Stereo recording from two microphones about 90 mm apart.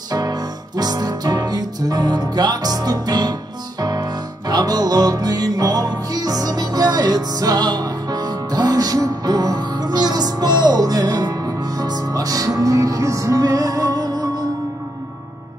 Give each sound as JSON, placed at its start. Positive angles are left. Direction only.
{"t": 0.1, "sound": "music", "side_deg": -45}